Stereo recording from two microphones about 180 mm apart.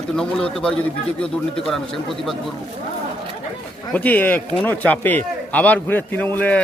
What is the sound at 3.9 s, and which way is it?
Speech, 10° left (ahead or behind).